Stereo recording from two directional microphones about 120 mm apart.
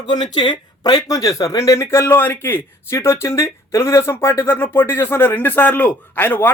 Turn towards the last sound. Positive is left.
turn(degrees=20)  # may be behind; listen again after turning